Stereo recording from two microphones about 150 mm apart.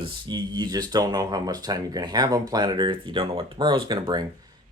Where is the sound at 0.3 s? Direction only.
30° right (ahead or behind).